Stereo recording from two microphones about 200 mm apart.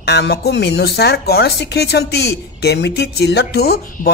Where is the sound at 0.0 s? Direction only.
55° left (ahead or behind).